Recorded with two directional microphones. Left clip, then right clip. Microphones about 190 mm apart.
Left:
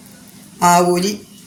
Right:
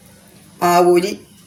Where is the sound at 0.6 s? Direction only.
50° right (ahead or behind).